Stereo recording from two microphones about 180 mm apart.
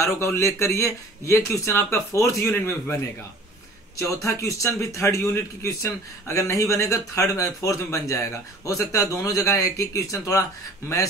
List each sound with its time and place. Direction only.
0.0 s a man's voice: 15° left (ahead or behind)
4.1 s a man's voice: 15° left (ahead or behind)